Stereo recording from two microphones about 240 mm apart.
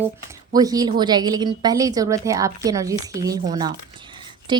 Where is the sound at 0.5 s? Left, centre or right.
Centre.